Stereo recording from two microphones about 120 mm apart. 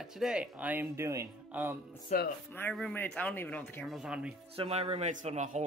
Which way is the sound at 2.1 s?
90° left.